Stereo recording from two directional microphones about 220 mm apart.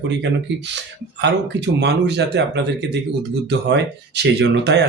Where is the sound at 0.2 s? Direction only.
50° right (ahead or behind).